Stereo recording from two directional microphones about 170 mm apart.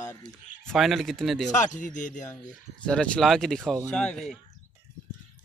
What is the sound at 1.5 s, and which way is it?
Speech, 45° left (ahead or behind).